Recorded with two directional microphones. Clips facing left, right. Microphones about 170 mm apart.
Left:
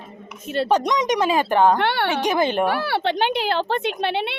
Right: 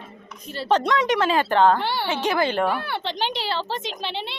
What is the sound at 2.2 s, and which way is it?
Speech, 15° left (ahead or behind).